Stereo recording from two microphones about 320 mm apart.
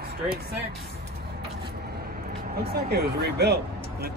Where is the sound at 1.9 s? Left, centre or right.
Right.